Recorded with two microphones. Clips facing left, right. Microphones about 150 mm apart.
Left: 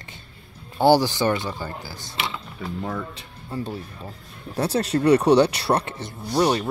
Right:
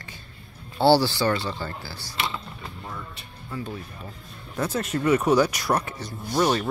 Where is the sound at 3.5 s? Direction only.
30° left (ahead or behind).